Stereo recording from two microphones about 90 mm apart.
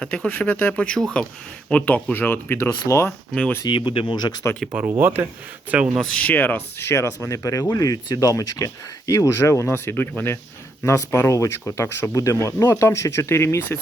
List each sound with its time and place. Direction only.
0.0 s speech: 15° left (ahead or behind)
2.6 s speech: 35° left (ahead or behind)
3.1 s speech: 10° left (ahead or behind)
3.7 s speech: 70° left (ahead or behind)
4.9 s speech: 20° right (ahead or behind)
6.0 s speech: 15° left (ahead or behind); by 13.7 s 30° left (ahead or behind)